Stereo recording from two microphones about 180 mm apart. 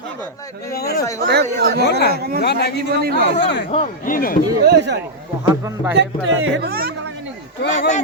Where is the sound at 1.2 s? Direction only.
60° right (ahead or behind).